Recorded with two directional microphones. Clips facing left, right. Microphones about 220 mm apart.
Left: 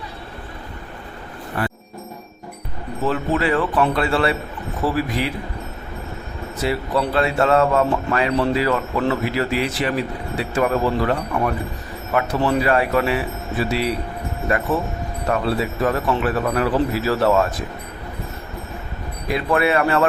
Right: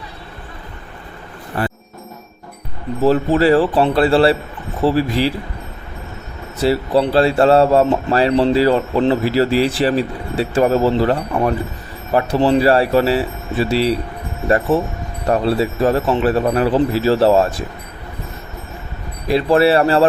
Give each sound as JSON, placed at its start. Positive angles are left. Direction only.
{"t": 1.5, "sound": "music", "side_deg": -30}
{"t": 3.0, "sound": "a man's voice", "side_deg": -35}
{"t": 6.6, "sound": "a man's voice", "side_deg": -30}
{"t": 19.3, "sound": "speech", "side_deg": -30}